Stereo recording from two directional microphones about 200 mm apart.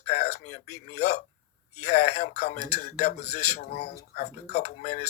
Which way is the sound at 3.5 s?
50° left (ahead or behind).